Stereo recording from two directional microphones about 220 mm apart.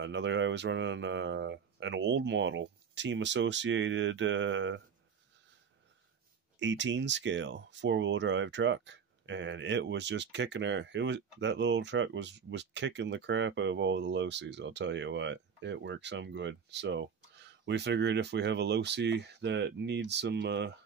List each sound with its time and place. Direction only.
0.0 s speech: 55° right (ahead or behind)
6.6 s speech: 55° right (ahead or behind)